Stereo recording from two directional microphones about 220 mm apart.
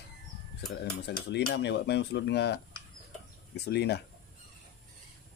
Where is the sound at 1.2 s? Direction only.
50° left (ahead or behind).